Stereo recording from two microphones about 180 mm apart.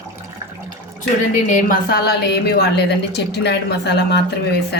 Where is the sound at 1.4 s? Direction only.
50° left (ahead or behind).